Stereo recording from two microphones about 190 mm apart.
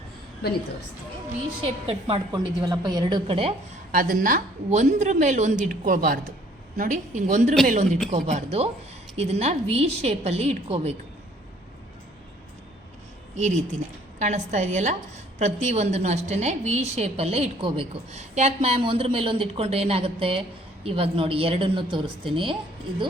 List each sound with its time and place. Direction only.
1.6 s a woman's voice: 30° right (ahead or behind)
3.9 s a woman's voice: 45° right (ahead or behind)
13.3 s a woman's voice: 40° right (ahead or behind)